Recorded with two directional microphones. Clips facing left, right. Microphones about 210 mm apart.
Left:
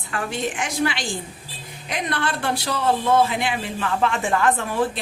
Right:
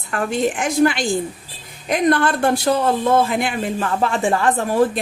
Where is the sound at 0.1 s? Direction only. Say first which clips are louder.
Right 6 dB; 45° right (ahead or behind).